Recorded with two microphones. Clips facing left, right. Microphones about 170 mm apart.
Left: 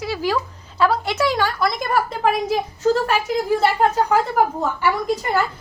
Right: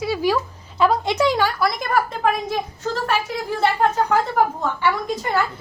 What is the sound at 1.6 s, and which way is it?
Speech, centre (ahead or behind).